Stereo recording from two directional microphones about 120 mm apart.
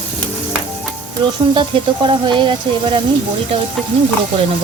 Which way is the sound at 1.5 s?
40° right (ahead or behind).